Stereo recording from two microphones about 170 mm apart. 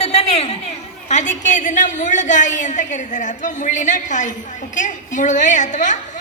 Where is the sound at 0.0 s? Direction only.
40° left (ahead or behind).